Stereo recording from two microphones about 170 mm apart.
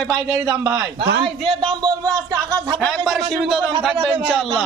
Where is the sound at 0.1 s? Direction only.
20° right (ahead or behind).